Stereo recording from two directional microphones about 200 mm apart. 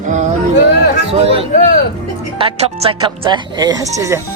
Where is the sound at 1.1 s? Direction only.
30° right (ahead or behind).